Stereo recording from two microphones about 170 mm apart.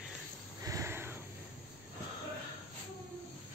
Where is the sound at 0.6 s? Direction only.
20° right (ahead or behind).